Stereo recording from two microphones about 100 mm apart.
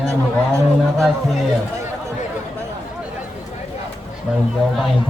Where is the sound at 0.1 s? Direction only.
30° right (ahead or behind).